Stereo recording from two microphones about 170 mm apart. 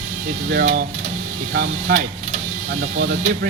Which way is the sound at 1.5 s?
65° right (ahead or behind).